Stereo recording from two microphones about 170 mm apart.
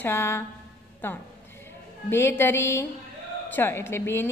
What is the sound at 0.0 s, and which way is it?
A woman's voice, 15° left (ahead or behind).